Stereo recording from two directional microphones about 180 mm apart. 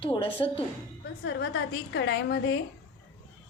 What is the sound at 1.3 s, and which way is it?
A woman's voice, 75° left (ahead or behind).